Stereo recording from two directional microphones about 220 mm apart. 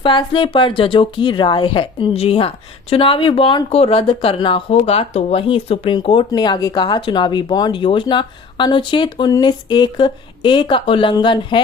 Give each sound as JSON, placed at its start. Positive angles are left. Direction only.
{"t": 0.0, "sound": "speech", "side_deg": 20}